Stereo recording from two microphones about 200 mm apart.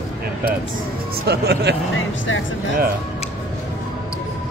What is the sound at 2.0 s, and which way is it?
Speech, 75° left (ahead or behind).